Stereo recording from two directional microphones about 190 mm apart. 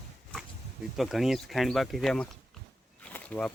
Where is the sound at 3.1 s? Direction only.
5° left (ahead or behind).